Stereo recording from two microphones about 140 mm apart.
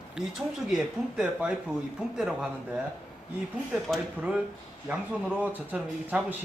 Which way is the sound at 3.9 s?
5° right (ahead or behind).